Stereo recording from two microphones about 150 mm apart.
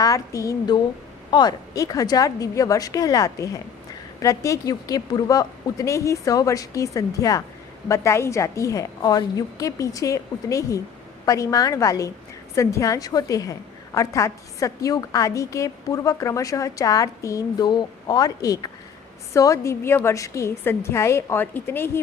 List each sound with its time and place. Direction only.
0.0 s a woman's voice: 20° left (ahead or behind)